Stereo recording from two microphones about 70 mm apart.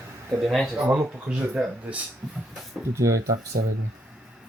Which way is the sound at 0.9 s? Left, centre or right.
Centre.